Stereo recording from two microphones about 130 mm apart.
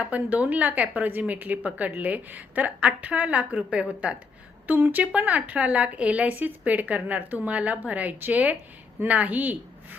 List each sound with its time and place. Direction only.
0.0 s a woman's voice: 10° right (ahead or behind)